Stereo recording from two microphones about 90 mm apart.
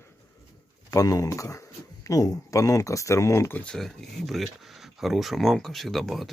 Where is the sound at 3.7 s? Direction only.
5° left (ahead or behind).